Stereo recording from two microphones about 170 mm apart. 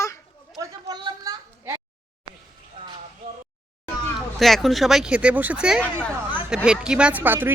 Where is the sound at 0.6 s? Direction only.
20° right (ahead or behind).